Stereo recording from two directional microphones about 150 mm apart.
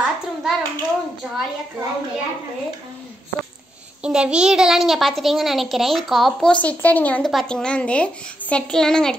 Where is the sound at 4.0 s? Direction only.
5° right (ahead or behind).